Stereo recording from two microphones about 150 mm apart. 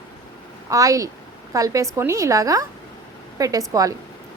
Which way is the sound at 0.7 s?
20° right (ahead or behind).